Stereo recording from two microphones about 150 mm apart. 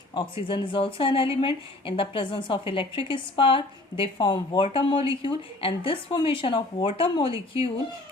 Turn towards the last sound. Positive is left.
turn(degrees=35)  # may be behind; listen again after turning